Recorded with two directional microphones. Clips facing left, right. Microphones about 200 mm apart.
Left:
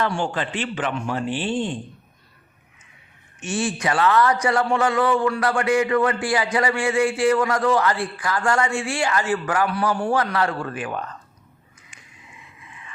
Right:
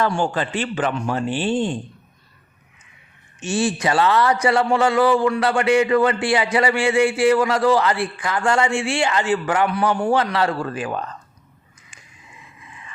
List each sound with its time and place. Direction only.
0.0 s a man's voice: 40° right (ahead or behind)
3.4 s a man's voice: 30° right (ahead or behind)